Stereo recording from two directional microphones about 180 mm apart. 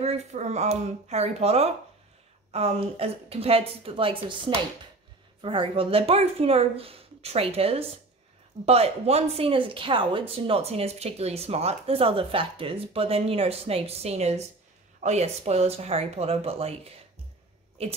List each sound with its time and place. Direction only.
0.0 s a woman's voice: 40° right (ahead or behind)
5.4 s a woman's voice: 30° right (ahead or behind)